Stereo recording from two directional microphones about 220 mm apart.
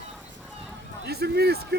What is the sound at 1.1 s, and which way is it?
Speech, 45° right (ahead or behind).